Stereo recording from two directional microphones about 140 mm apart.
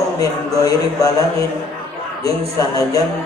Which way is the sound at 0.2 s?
25° left (ahead or behind).